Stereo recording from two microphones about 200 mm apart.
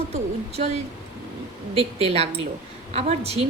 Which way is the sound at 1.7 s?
30° right (ahead or behind).